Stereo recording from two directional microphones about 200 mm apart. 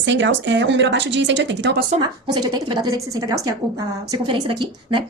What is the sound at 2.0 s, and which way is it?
Speech, 20° right (ahead or behind).